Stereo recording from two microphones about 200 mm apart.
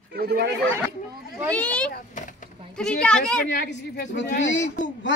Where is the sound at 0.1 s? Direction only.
50° right (ahead or behind).